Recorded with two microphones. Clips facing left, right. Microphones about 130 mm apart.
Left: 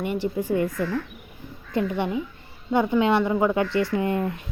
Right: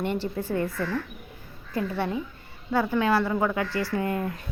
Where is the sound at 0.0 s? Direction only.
10° left (ahead or behind).